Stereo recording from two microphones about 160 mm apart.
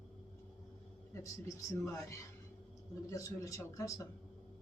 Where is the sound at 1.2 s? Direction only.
20° left (ahead or behind).